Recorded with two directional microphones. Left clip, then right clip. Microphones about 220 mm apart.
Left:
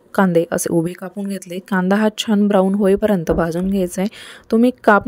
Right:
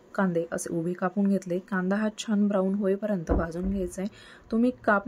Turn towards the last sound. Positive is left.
turn(degrees=40)  # may be behind; listen again after turning